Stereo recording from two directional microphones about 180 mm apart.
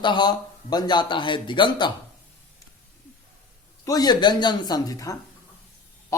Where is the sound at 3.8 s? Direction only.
20° left (ahead or behind).